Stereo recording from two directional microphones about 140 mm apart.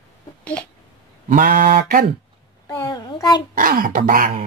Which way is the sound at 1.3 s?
75° right (ahead or behind).